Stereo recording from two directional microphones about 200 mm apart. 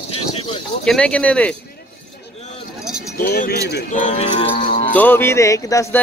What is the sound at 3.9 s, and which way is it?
Music, 35° left (ahead or behind).